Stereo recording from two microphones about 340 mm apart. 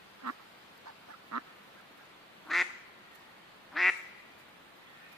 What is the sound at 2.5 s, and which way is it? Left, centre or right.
Quack, centre.